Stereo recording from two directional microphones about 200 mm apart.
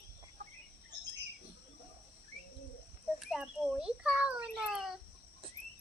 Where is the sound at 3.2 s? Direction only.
Centre (ahead or behind).